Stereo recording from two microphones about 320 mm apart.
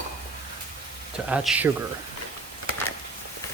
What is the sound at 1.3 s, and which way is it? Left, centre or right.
Speech, centre.